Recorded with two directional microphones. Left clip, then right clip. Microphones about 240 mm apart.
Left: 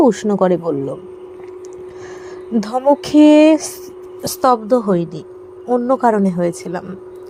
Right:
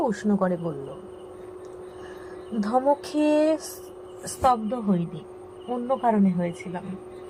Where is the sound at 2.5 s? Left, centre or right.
Left.